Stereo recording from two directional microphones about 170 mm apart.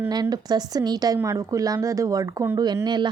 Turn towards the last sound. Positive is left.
turn(degrees=-25)  # may be behind; listen again after turning